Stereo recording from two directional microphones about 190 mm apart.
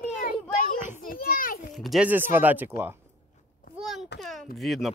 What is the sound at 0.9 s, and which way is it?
Children playing, 50° left (ahead or behind).